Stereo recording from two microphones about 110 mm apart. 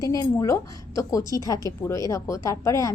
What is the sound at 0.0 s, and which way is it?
A woman's voice, 30° left (ahead or behind).